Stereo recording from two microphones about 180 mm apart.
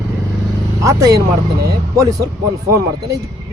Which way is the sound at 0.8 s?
20° right (ahead or behind).